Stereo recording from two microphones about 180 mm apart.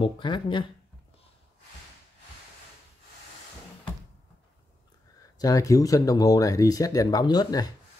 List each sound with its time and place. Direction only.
0.0 s speech: 25° left (ahead or behind)
5.4 s speech: 20° left (ahead or behind)